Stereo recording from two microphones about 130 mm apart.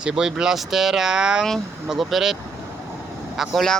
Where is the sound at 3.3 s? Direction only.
Centre (ahead or behind).